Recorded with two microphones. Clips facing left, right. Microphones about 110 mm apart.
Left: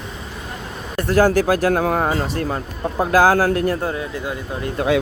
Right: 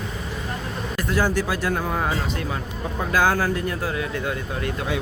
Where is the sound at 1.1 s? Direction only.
45° left (ahead or behind).